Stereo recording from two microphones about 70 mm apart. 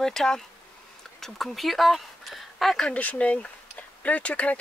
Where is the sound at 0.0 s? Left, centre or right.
Centre.